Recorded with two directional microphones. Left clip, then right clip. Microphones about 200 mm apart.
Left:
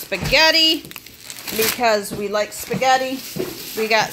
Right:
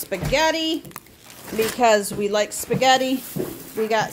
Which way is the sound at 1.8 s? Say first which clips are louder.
Right 3 dB; 40° right (ahead or behind).